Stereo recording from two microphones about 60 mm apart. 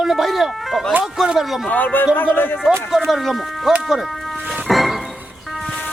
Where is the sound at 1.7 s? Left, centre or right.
Left.